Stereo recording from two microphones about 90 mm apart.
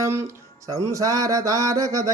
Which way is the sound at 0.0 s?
30° right (ahead or behind).